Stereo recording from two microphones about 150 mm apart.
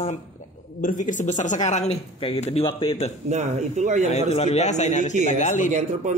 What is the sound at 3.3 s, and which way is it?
Speech, 50° right (ahead or behind).